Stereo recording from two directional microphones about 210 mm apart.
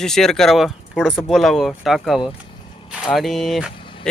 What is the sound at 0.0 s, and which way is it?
Speech, centre (ahead or behind).